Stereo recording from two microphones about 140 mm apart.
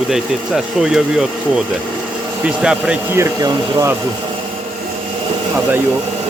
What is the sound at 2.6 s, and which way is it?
Speech, 10° right (ahead or behind).